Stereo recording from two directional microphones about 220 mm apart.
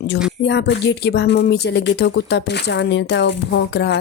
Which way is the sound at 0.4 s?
50° left (ahead or behind).